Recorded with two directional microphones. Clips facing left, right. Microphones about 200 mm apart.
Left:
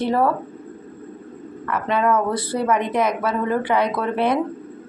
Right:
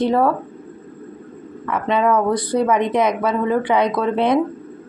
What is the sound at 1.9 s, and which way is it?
A woman's voice, 15° right (ahead or behind).